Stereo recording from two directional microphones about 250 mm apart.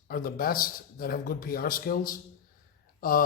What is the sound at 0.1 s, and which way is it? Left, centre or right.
A man's voice, left.